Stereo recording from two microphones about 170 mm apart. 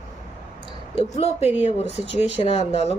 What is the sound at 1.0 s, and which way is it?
Speech, 40° left (ahead or behind).